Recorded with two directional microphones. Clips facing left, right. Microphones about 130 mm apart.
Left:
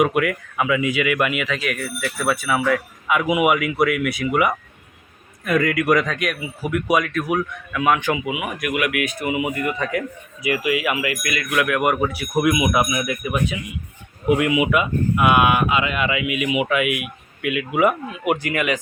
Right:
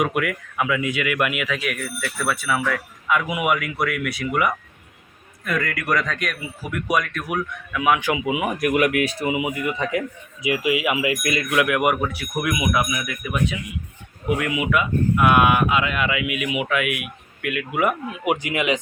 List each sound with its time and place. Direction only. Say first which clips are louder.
0.0 s speech: left 4 dB; centre (ahead or behind)
2.0 s speech: left 4 dB; 10° left (ahead or behind); by 8.2 s 10° right (ahead or behind)
8.2 s speech: right 3 dB; 30° right (ahead or behind)
9.3 s speech: left 1 dB; 15° right (ahead or behind)
11.9 s speech: left 4 dB; 10° left (ahead or behind)
14.3 s speech: left 5 dB; 10° left (ahead or behind)
18.3 s speech: left 1 dB; 15° right (ahead or behind)